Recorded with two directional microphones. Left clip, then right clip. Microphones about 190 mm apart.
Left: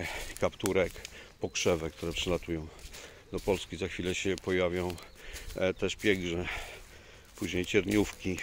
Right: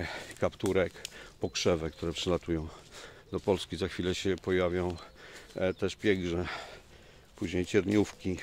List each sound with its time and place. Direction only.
0.0 s speech: 25° right (ahead or behind)